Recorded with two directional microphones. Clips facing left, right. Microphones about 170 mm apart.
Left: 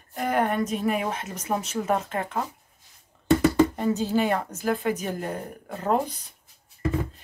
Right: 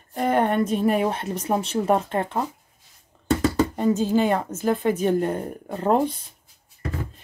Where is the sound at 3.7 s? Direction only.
20° right (ahead or behind).